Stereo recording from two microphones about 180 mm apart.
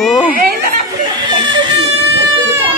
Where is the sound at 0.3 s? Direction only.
50° right (ahead or behind).